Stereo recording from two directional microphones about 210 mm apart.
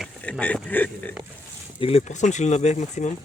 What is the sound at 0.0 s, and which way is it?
Speech, 5° left (ahead or behind).